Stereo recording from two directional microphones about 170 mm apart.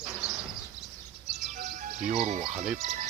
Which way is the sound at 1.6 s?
50° right (ahead or behind).